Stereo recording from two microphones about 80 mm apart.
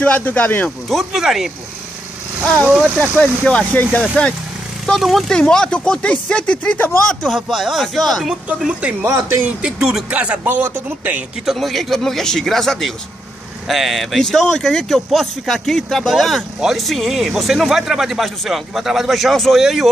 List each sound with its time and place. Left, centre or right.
0.0 s speech: centre
0.8 s speech: centre
2.4 s speech: centre
4.8 s speech: centre
5.4 s speech: centre
7.1 s speech: centre
8.5 s speech: centre
9.0 s speech: right
9.6 s speech: centre
11.4 s speech: centre